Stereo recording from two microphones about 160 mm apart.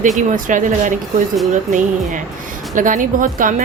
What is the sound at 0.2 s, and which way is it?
Speech, 55° right (ahead or behind).